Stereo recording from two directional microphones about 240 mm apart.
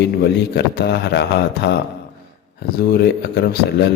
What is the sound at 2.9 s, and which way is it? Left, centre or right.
A man's voice, left.